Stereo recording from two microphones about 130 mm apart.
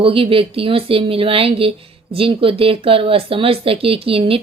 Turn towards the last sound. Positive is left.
turn(degrees=-45)  # may be behind; listen again after turning